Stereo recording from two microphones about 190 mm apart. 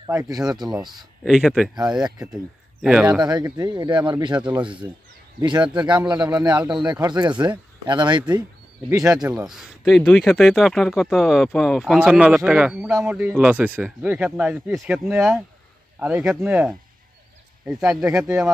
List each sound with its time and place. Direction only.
0.1 s speech: 10° right (ahead or behind)
3.2 s speech: 20° right (ahead or behind)
9.5 s speech: centre (ahead or behind)